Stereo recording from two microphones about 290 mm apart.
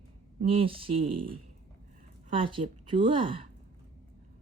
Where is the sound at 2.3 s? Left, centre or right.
Centre.